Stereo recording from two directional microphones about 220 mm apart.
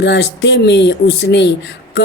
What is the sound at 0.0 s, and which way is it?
Speech, 50° left (ahead or behind).